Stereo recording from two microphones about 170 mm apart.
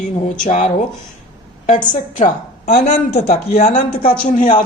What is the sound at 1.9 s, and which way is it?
A woman's voice, 50° left (ahead or behind).